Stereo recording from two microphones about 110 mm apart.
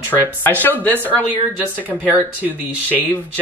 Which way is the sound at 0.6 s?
15° left (ahead or behind).